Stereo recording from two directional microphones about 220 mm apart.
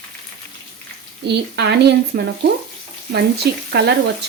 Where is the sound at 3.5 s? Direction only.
50° right (ahead or behind).